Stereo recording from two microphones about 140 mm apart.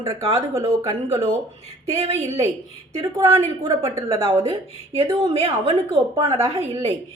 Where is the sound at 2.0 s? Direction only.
50° right (ahead or behind).